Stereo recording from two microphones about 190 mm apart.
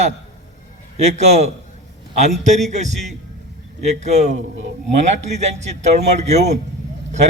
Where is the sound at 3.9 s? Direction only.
35° right (ahead or behind).